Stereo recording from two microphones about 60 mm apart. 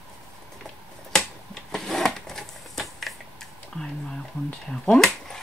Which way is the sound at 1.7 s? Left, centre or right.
Centre.